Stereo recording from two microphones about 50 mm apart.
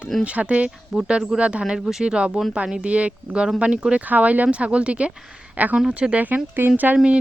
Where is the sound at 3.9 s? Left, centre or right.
Right.